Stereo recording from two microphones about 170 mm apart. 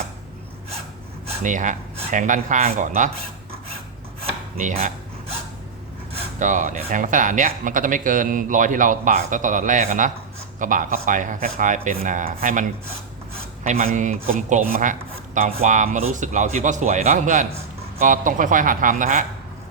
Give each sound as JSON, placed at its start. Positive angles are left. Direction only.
{"t": 1.4, "sound": "speech", "side_deg": -45}
{"t": 6.4, "sound": "speech", "side_deg": -45}
{"t": 13.7, "sound": "speech", "side_deg": -45}